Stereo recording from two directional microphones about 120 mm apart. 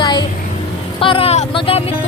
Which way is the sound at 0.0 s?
40° left (ahead or behind).